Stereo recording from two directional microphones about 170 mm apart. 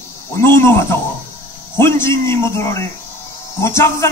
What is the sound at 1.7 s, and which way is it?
A man's voice, 15° left (ahead or behind).